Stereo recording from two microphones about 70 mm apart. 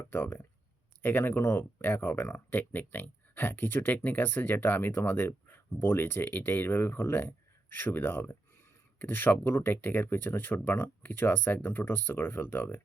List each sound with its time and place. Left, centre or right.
0.0 s speech: left